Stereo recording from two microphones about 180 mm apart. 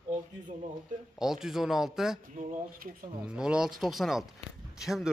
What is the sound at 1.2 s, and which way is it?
Speech, centre (ahead or behind).